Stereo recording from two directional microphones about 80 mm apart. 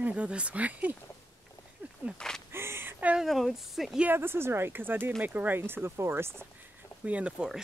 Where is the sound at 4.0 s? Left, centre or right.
Right.